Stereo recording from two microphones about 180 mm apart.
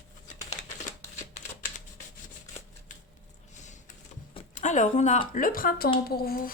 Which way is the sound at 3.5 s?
40° left (ahead or behind).